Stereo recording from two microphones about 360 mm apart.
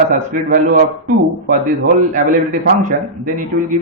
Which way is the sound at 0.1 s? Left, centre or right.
Right.